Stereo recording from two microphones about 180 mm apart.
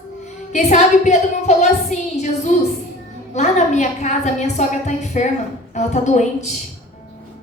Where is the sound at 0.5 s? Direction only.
40° left (ahead or behind).